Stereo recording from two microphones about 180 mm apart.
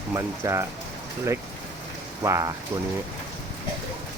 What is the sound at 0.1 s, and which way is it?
Speech, 15° right (ahead or behind).